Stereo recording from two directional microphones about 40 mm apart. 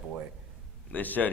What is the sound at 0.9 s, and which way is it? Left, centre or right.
Speech, left.